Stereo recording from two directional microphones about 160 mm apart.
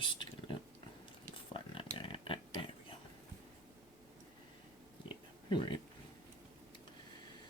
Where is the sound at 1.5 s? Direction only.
35° left (ahead or behind).